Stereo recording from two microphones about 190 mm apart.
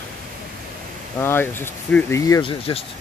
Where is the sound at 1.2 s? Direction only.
10° left (ahead or behind).